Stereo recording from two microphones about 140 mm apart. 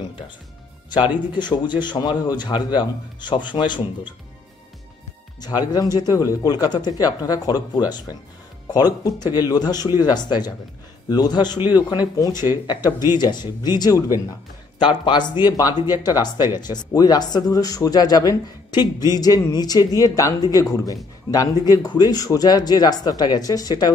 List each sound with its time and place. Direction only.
0.8 s speech: 35° left (ahead or behind)
5.4 s a man's voice: 30° left (ahead or behind)